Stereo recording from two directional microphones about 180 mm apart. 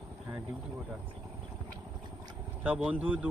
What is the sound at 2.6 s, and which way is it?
Speech, 5° right (ahead or behind).